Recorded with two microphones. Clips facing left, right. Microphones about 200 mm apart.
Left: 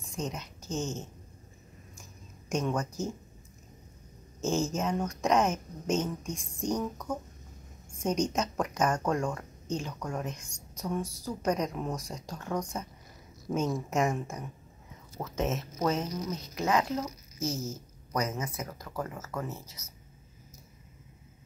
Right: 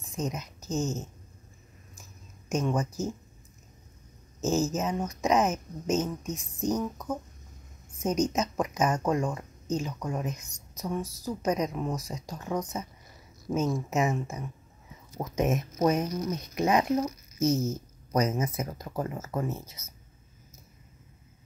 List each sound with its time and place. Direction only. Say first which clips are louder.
0.0 s a woman's voice: right 3 dB; 5° right (ahead or behind)
2.5 s speech: right 2 dB; 5° right (ahead or behind)
4.4 s speech: right 2 dB; 5° right (ahead or behind)
11.0 s a woman's voice: even; 10° left (ahead or behind)
11.2 s speech: right 2 dB; 5° right (ahead or behind)
17.5 s speech: right 8 dB; centre (ahead or behind)
18.1 s speech: right 5 dB; 20° right (ahead or behind)